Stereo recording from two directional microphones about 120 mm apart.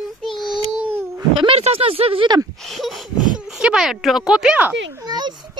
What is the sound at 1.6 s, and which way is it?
Speech, 55° right (ahead or behind).